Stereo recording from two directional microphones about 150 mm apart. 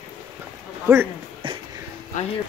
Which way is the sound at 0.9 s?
20° right (ahead or behind).